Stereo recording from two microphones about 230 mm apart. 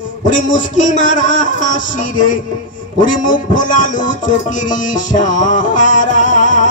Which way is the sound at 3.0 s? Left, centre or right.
Left.